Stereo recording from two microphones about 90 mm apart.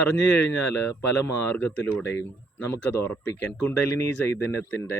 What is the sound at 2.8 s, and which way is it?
Speech, 20° left (ahead or behind).